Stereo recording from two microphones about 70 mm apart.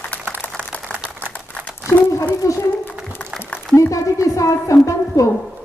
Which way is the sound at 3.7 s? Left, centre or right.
Left.